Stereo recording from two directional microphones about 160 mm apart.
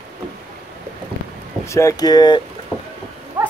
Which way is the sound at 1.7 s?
20° left (ahead or behind).